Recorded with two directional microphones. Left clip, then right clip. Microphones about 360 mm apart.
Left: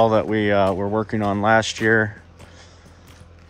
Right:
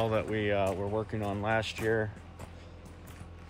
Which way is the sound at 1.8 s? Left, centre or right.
Left.